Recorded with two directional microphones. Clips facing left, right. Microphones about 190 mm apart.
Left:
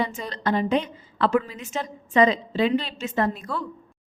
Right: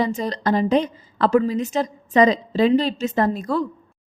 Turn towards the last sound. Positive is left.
turn(degrees=-40)  # may be behind; listen again after turning